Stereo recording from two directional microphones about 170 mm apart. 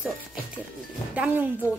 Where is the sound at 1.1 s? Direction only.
10° right (ahead or behind).